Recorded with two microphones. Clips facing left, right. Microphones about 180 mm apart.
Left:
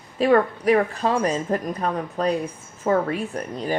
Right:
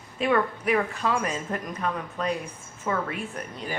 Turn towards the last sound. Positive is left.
turn(degrees=35)  # may be behind; listen again after turning